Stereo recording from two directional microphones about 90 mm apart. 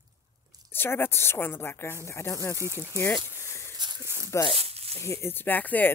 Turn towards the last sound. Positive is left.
turn(degrees=20)  # may be behind; listen again after turning